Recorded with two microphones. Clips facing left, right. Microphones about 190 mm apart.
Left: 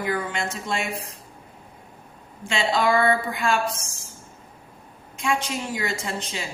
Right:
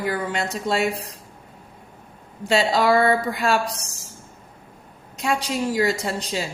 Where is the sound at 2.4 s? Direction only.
40° right (ahead or behind).